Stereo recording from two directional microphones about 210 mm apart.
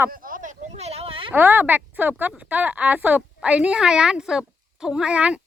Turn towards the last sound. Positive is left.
turn(degrees=-5)  # may be behind; listen again after turning